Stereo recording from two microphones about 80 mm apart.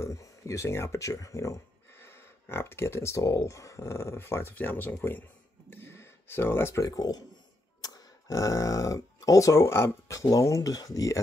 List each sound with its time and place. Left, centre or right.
0.0 s speech: left
2.0 s speech: left
5.7 s a sound: left
6.8 s speech: left